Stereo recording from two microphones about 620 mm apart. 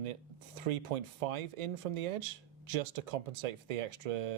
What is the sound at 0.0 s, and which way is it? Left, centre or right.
Speech, right.